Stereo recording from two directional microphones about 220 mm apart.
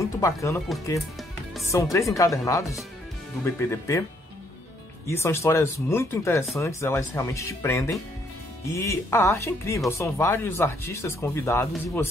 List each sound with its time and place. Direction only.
0.0 s speech: 15° left (ahead or behind)
1.7 s speech: 15° left (ahead or behind)
5.0 s speech: 10° left (ahead or behind)